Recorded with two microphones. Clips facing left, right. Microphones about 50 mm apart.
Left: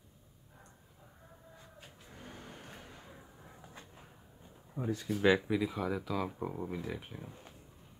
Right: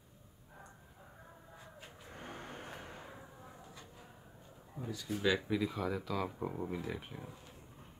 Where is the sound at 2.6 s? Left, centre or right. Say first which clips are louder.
Right 4 dB; right.